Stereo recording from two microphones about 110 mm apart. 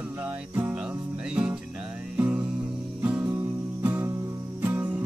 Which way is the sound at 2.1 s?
15° right (ahead or behind).